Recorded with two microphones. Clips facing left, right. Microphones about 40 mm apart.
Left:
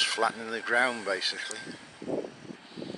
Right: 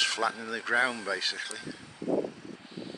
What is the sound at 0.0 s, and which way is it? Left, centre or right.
Speech, centre.